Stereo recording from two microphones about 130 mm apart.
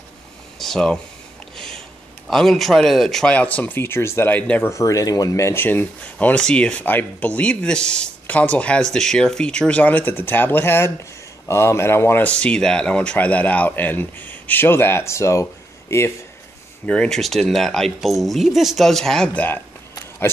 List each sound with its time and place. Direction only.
0.6 s a sound: 5° left (ahead or behind)
2.2 s speech: centre (ahead or behind)
4.7 s speech: 25° left (ahead or behind)
16.8 s speech: 10° left (ahead or behind)